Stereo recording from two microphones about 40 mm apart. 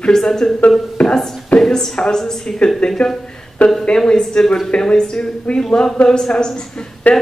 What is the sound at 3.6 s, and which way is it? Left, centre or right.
Speech, left.